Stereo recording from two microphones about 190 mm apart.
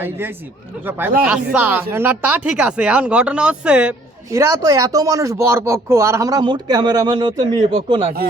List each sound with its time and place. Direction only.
0.0 s speech: 10° right (ahead or behind); by 8.1 s 30° right (ahead or behind)